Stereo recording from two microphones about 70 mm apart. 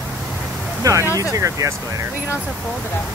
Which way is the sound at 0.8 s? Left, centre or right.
Right.